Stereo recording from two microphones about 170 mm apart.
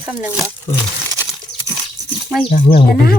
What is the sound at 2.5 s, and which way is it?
Speech, 40° left (ahead or behind).